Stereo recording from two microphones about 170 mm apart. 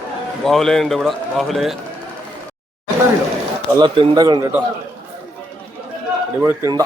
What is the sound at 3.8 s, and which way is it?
Speech, 25° right (ahead or behind).